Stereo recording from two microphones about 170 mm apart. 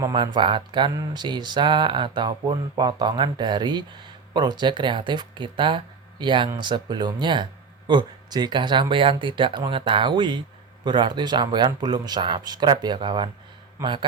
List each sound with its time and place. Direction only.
0.0 s speech: 25° right (ahead or behind)